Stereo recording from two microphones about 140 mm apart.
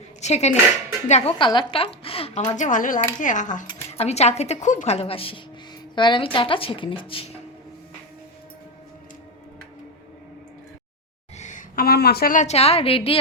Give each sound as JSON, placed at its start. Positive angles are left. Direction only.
{"t": 0.2, "sound": "a woman's voice", "side_deg": 50}
{"t": 1.4, "sound": "a woman's voice", "side_deg": 35}
{"t": 2.6, "sound": "speech", "side_deg": 70}
{"t": 3.9, "sound": "a woman's voice", "side_deg": 50}
{"t": 11.3, "sound": "a woman's voice", "side_deg": 65}